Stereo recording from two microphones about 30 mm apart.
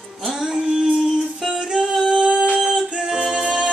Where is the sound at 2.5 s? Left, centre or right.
Right.